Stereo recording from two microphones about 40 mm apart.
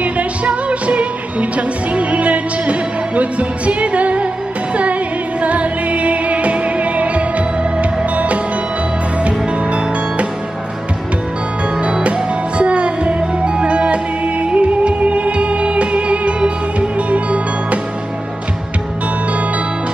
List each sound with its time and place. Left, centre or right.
0.0 s music: right
5.4 s music: right
11.8 s music: right